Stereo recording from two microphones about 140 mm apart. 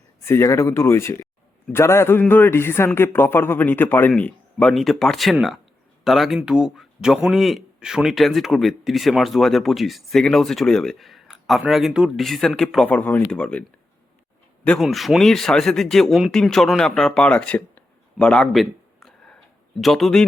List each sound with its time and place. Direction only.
0.3 s a man's voice: 20° left (ahead or behind)
18.2 s a sound: 5° left (ahead or behind)
19.8 s a man's voice: centre (ahead or behind)